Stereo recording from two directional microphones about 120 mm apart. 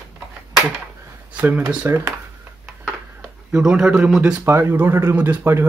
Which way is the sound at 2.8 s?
5° right (ahead or behind).